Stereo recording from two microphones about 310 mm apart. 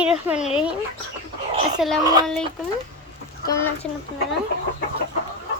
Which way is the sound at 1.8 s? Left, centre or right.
Centre.